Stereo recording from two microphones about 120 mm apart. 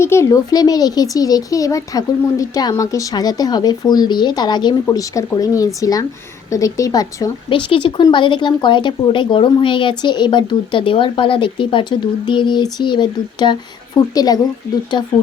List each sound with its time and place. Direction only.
0.0 s speech: 20° left (ahead or behind)
7.7 s speech: 45° left (ahead or behind)